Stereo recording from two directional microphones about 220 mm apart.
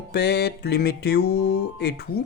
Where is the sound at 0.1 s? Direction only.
50° left (ahead or behind).